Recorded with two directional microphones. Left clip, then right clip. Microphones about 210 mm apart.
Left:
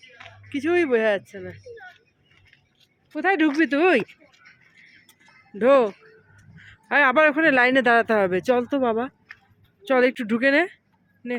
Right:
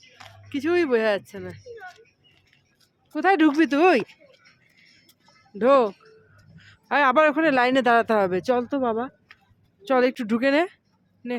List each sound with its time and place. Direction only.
0.4 s speech: 5° left (ahead or behind)
3.1 s speech: 15° right (ahead or behind)
3.9 s speech: 5° left (ahead or behind)
5.5 s speech: centre (ahead or behind)